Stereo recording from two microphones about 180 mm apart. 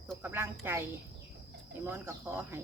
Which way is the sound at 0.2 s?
10° right (ahead or behind).